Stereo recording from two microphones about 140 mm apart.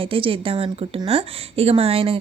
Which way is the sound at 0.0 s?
40° right (ahead or behind).